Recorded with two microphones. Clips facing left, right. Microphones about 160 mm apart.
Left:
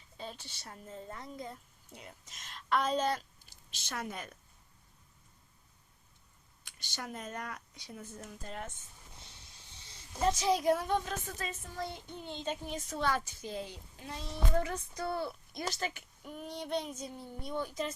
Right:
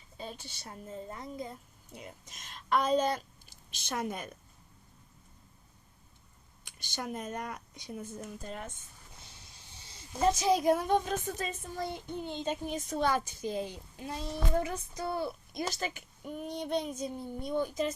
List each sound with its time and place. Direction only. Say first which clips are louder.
0.2 s speech: right 2 dB; 15° right (ahead or behind)
6.7 s speech: right 5 dB; 15° right (ahead or behind)
10.4 s speech: right 1 dB; 15° right (ahead or behind)